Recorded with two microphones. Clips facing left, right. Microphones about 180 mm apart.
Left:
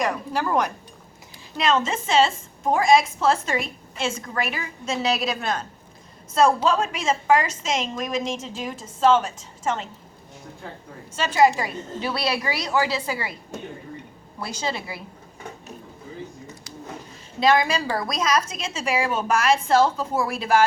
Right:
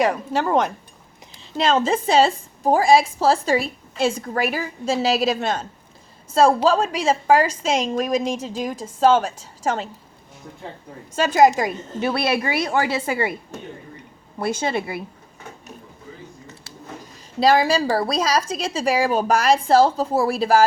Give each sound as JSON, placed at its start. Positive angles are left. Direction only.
{"t": 0.0, "sound": "a woman's voice", "side_deg": -25}
{"t": 10.6, "sound": "speech", "side_deg": -25}
{"t": 11.2, "sound": "a woman's voice", "side_deg": -45}
{"t": 14.3, "sound": "a woman's voice", "side_deg": -55}
{"t": 17.4, "sound": "a woman's voice", "side_deg": -35}